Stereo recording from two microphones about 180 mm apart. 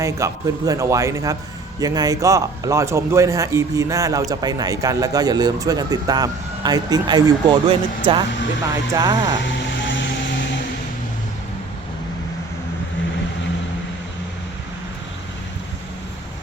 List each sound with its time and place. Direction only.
0.0 s a man's voice: 20° right (ahead or behind)
9.3 s vehicle: 90° left